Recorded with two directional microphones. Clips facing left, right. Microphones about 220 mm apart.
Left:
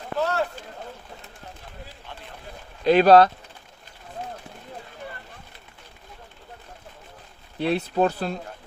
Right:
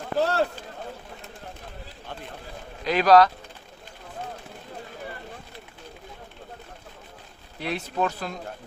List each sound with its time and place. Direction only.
0.2 s speech: 35° right (ahead or behind)
2.8 s speech: 30° left (ahead or behind)
7.6 s speech: 30° left (ahead or behind)